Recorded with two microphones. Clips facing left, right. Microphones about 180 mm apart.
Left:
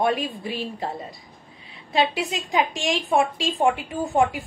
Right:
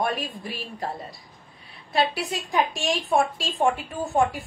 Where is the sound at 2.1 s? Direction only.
20° left (ahead or behind).